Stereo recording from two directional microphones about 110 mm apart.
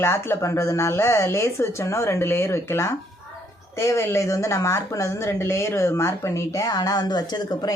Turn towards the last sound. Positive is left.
turn(degrees=40)  # may be behind; listen again after turning